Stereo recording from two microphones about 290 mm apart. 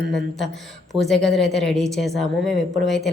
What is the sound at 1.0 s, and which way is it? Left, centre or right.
A woman's voice, centre.